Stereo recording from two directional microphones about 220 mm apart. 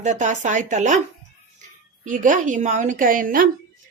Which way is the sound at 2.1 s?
35° right (ahead or behind).